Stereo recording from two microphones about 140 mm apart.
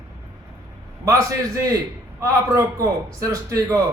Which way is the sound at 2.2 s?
20° right (ahead or behind).